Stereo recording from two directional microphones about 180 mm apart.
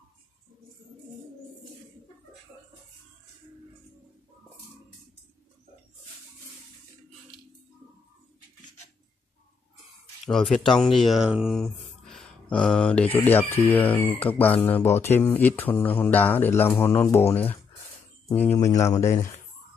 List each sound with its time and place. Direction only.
10.2 s speech: centre (ahead or behind)